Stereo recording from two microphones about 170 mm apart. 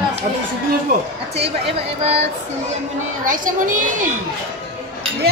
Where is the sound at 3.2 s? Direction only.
50° right (ahead or behind).